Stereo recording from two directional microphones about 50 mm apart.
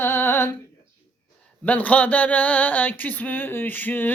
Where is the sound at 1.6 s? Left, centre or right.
Left.